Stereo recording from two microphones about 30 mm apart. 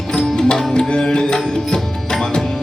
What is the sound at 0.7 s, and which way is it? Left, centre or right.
Music, left.